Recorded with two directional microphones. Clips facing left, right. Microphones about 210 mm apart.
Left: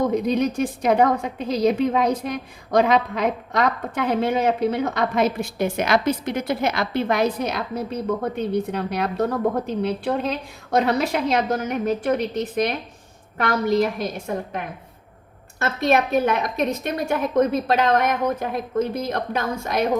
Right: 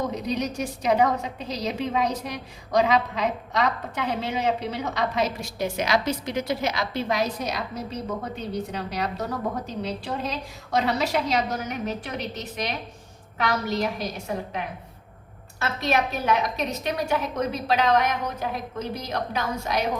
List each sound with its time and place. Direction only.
0.1 s a woman's voice: 55° left (ahead or behind)
15.5 s a woman's voice: 50° left (ahead or behind)